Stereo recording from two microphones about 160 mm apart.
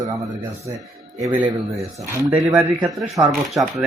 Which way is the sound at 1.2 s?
15° right (ahead or behind).